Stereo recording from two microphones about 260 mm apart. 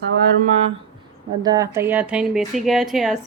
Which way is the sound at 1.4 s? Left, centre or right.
Centre.